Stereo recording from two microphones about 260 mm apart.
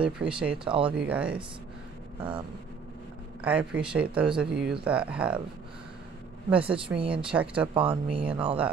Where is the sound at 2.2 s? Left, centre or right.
Centre.